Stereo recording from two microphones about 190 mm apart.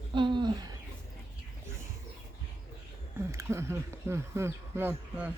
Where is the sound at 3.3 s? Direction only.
15° right (ahead or behind).